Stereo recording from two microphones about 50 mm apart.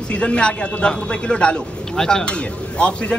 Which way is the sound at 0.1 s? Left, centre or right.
Left.